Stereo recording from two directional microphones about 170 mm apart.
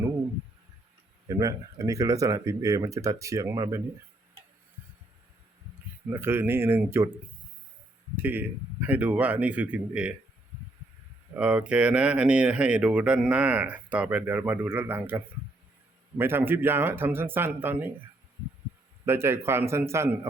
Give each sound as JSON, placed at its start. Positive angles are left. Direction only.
{"t": 1.3, "sound": "speech", "side_deg": -20}
{"t": 6.1, "sound": "speech", "side_deg": -15}
{"t": 8.1, "sound": "speech", "side_deg": -10}
{"t": 11.3, "sound": "speech", "side_deg": -5}
{"t": 19.0, "sound": "speech", "side_deg": -15}